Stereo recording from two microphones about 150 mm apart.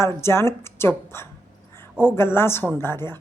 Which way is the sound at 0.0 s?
15° left (ahead or behind).